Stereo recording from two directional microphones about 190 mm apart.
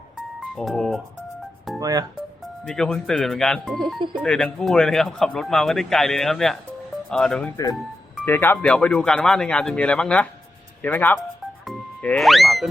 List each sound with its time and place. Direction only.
0.3 s speech: centre (ahead or behind)
1.8 s speech: 20° right (ahead or behind)
2.6 s speech: 5° left (ahead or behind)
7.5 s speech: 20° left (ahead or behind)
11.6 s music: centre (ahead or behind)